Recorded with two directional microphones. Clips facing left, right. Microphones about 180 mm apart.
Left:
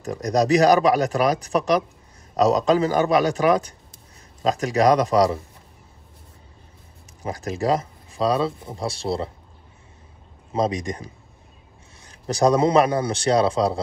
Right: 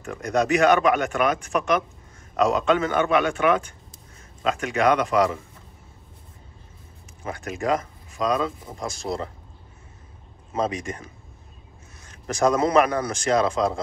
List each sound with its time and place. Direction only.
0.0 s speech: 35° left (ahead or behind)
7.2 s speech: 35° left (ahead or behind)
10.5 s speech: 35° left (ahead or behind)